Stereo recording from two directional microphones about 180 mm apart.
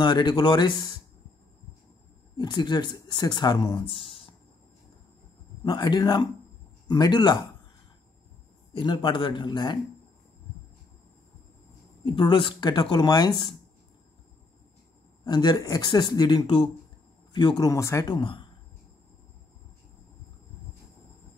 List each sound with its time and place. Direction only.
0.0 s speech: 25° left (ahead or behind)
2.3 s speech: 25° left (ahead or behind)
5.6 s speech: 25° left (ahead or behind)
8.7 s speech: 25° left (ahead or behind)
12.0 s speech: 30° left (ahead or behind)
15.2 s speech: 25° left (ahead or behind)